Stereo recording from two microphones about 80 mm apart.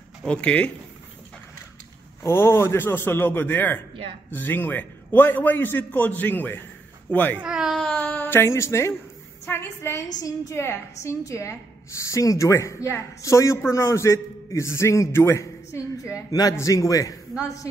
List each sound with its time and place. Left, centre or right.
0.2 s speech: centre
2.2 s a man's voice: left
7.4 s speech: centre
7.7 s a sound: centre
8.1 s a woman's voice: left
16.3 s a man's voice: left